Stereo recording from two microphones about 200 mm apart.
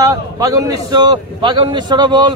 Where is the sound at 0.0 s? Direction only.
15° right (ahead or behind).